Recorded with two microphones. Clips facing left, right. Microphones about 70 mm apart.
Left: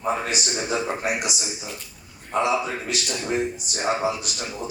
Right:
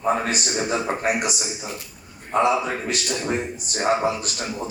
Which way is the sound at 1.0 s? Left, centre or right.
Right.